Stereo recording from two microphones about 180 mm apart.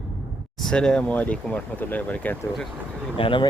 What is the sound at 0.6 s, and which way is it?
Speech, 5° left (ahead or behind).